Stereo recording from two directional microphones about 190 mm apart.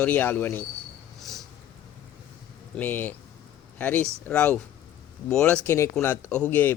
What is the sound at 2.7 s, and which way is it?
Speech, 10° left (ahead or behind).